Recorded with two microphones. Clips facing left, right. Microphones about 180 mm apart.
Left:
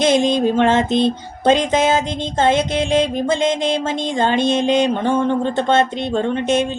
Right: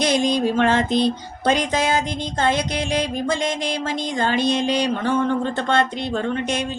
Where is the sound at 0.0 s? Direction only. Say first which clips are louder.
Left 4 dB; 25° left (ahead or behind).